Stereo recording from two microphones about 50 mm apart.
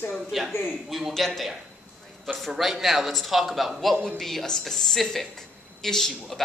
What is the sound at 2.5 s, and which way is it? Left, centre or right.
A man's voice, centre.